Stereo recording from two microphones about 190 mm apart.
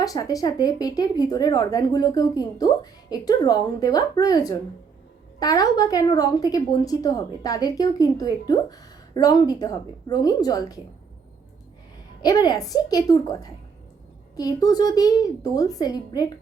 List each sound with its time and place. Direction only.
0.0 s a woman's voice: 20° left (ahead or behind)
12.2 s a woman's voice: 20° left (ahead or behind)